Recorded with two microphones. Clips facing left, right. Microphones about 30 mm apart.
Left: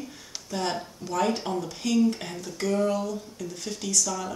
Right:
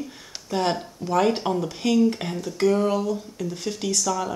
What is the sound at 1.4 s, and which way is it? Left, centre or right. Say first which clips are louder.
Dishes: right 5 dB; right.